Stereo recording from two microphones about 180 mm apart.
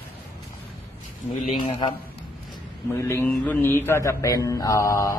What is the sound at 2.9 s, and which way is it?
Speech, 15° left (ahead or behind).